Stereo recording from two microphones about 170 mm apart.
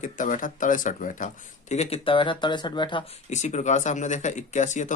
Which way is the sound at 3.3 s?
45° left (ahead or behind).